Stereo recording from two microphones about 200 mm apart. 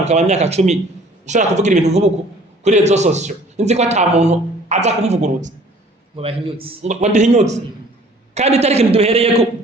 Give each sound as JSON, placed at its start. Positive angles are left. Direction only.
{"t": 0.0, "sound": "a man's voice", "side_deg": -35}